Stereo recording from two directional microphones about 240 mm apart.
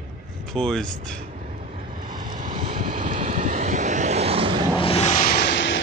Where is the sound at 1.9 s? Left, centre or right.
Right.